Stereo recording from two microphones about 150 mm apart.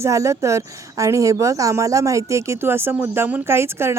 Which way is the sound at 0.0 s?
20° right (ahead or behind).